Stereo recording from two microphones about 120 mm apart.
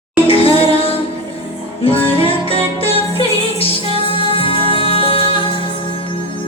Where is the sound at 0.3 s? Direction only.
50° left (ahead or behind).